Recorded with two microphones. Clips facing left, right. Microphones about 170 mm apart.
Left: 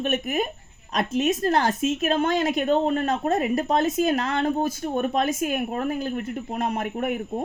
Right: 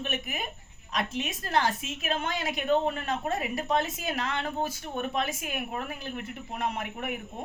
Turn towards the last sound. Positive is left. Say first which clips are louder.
# left 8 dB
turn(degrees=45)  # may be behind; listen again after turning